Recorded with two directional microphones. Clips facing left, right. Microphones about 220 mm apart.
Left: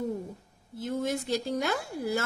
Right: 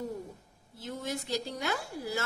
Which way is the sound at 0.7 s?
50° left (ahead or behind).